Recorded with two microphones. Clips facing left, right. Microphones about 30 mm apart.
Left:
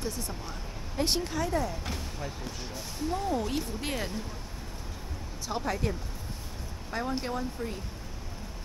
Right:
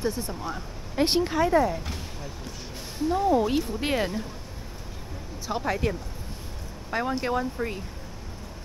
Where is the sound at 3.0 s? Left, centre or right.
Centre.